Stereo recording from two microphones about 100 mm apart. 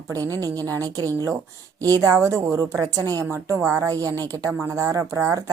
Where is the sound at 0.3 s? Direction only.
35° right (ahead or behind).